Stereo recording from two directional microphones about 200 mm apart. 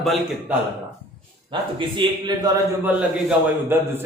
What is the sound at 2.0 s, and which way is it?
Speech, 20° right (ahead or behind).